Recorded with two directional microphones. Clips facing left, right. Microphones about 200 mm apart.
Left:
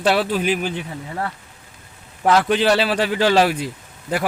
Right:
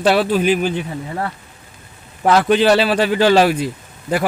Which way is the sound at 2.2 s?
60° right (ahead or behind).